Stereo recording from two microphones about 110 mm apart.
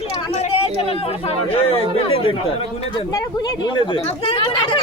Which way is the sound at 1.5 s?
60° left (ahead or behind).